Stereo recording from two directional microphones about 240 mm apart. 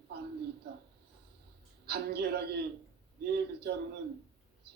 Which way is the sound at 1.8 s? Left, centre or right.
Right.